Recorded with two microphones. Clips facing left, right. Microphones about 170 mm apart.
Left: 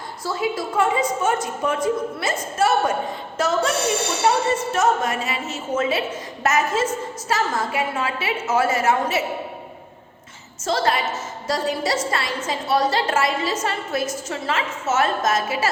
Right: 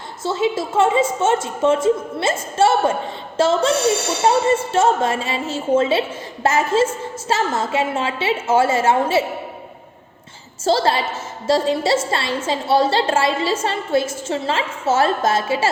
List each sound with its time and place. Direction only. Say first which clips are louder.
0.2 s a woman's voice: right 5 dB; 25° right (ahead or behind)
4.7 s a woman's voice: right 3 dB; 30° right (ahead or behind)
10.6 s a woman's voice: right 4 dB; 30° right (ahead or behind)